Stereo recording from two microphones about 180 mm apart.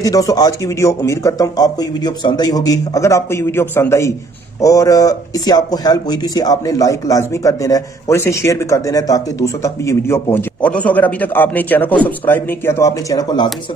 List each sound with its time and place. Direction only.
0.0 s speech: 20° left (ahead or behind)